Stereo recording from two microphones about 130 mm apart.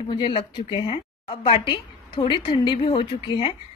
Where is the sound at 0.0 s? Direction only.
40° left (ahead or behind).